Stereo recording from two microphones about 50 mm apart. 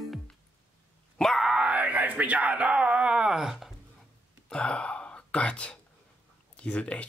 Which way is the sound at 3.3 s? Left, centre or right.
Centre.